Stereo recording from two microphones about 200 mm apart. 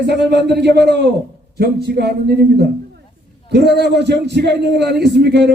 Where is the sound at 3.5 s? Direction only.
55° right (ahead or behind).